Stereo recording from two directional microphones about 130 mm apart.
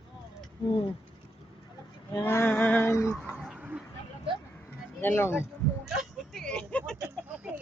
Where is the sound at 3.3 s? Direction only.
5° right (ahead or behind).